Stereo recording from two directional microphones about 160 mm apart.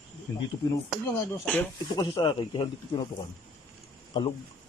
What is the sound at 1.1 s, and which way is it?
Speech, 10° left (ahead or behind).